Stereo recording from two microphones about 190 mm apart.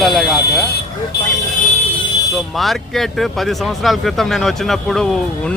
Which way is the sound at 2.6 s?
Centre (ahead or behind).